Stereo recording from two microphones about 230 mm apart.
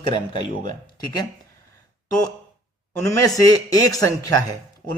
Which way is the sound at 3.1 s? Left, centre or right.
Centre.